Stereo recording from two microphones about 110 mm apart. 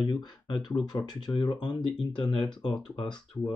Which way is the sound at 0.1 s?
40° left (ahead or behind).